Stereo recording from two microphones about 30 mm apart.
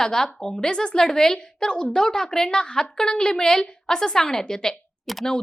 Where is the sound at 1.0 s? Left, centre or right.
Centre.